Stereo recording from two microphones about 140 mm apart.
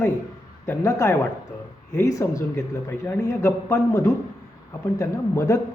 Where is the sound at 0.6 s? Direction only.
20° left (ahead or behind).